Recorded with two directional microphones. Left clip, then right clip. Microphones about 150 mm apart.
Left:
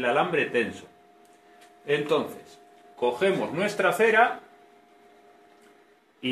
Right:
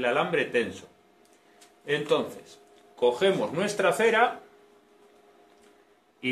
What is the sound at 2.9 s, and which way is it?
Speech, 5° left (ahead or behind).